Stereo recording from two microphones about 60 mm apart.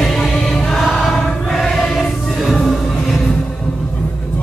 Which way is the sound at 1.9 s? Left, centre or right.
Centre.